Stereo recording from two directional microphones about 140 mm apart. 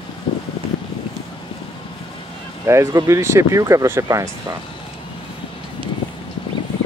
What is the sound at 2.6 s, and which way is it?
Speech, 20° right (ahead or behind).